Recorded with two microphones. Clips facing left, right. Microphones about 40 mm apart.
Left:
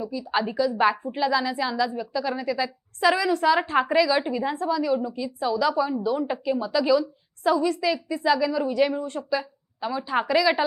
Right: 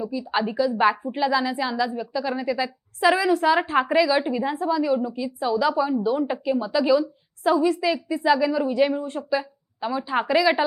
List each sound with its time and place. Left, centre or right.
0.0 s speech: centre
0.3 s a woman's voice: centre